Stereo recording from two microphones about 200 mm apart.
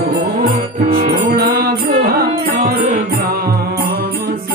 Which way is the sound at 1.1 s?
50° right (ahead or behind).